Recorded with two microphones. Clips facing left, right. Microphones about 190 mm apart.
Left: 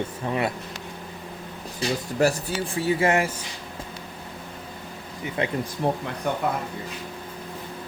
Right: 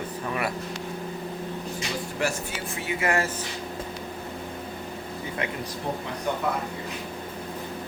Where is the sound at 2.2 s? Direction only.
40° left (ahead or behind).